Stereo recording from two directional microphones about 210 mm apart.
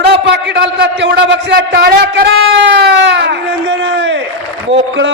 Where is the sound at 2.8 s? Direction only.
55° right (ahead or behind).